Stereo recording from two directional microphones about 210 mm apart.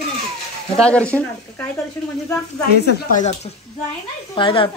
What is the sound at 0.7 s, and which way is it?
Speech, 5° left (ahead or behind).